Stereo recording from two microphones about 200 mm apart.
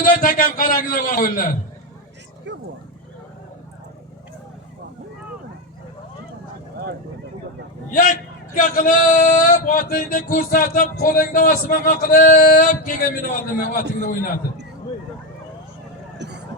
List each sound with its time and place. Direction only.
0.0 s a man's voice: 45° left (ahead or behind)
2.5 s speech: 60° right (ahead or behind)
7.9 s a man's voice: 40° left (ahead or behind)